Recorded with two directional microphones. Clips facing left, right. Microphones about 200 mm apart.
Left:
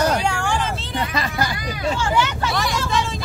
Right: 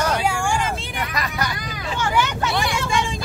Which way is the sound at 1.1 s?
30° left (ahead or behind).